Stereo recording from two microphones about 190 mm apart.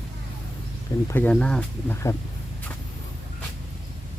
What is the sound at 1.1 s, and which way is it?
Speech, 10° left (ahead or behind).